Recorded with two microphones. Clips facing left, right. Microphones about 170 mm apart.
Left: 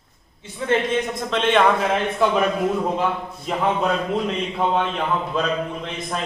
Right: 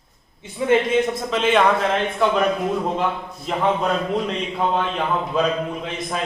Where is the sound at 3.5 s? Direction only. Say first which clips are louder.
Right 1 dB; centre (ahead or behind).